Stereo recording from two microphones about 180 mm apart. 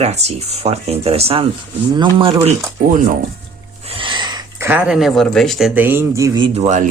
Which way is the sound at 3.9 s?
25° right (ahead or behind).